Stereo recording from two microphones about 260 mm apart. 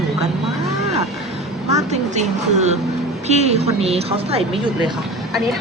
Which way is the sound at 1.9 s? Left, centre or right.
Right.